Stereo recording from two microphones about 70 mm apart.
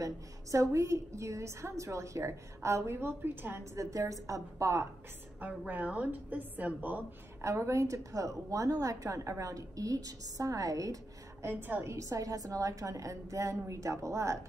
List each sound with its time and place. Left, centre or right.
0.0 s a woman's voice: right
3.7 s a woman's voice: right
5.7 s a woman's voice: right
7.4 s a woman's voice: right
11.4 s a woman's voice: right
11.9 s a woman's voice: right